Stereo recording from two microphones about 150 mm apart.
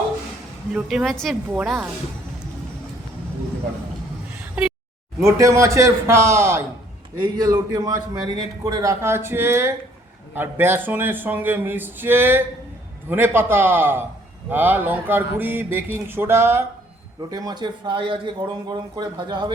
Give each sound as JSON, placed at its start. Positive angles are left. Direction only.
{"t": 0.7, "sound": "a woman's voice", "side_deg": -5}
{"t": 5.2, "sound": "a man's voice", "side_deg": -20}